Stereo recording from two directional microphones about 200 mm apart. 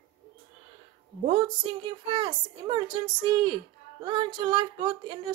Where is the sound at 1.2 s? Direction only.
25° right (ahead or behind).